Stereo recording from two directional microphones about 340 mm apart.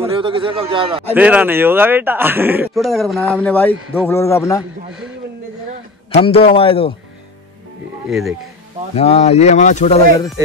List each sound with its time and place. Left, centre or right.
0.0 s a man's voice: centre
1.1 s speech: centre
6.1 s speech: centre
8.1 s speech: centre
8.9 s speech: centre